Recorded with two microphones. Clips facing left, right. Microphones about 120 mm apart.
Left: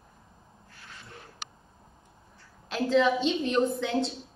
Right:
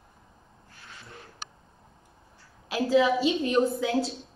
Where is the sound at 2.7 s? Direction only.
5° right (ahead or behind).